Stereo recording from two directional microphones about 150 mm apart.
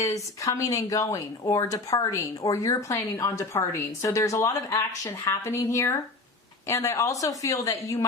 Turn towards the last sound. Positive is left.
turn(degrees=20)  # may be behind; listen again after turning